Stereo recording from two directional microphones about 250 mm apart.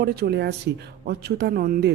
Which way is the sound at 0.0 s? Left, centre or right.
Right.